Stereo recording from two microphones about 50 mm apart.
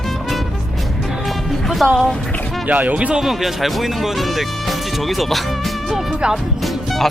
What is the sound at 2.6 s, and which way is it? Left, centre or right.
Speech, right.